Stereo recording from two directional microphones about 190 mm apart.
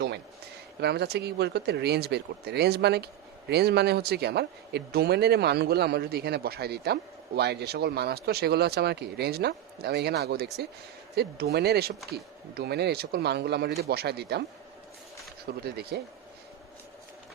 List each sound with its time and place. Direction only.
0.8 s speech: 60° right (ahead or behind)
15.4 s speech: 55° right (ahead or behind)